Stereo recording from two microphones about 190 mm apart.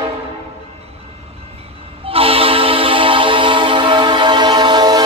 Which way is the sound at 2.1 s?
30° right (ahead or behind).